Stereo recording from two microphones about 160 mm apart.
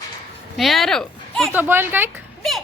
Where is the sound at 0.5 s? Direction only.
Centre (ahead or behind).